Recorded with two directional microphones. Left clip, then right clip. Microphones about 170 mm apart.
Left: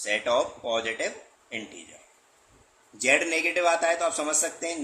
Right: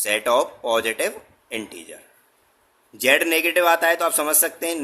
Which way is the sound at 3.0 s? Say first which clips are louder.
Right 5 dB; 65° right (ahead or behind).